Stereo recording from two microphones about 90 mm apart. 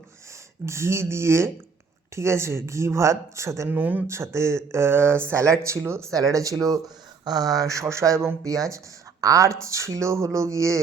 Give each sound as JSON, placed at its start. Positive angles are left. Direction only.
{"t": 0.6, "sound": "speech", "side_deg": -30}
{"t": 3.7, "sound": "speech", "side_deg": -20}
{"t": 4.0, "sound": "speech", "side_deg": -30}